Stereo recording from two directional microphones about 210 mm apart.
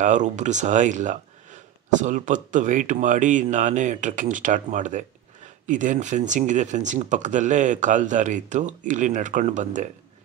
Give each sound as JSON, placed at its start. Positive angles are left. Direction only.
{"t": 0.0, "sound": "speech", "side_deg": -35}